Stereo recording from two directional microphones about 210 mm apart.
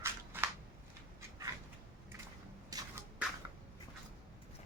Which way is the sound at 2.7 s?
15° right (ahead or behind).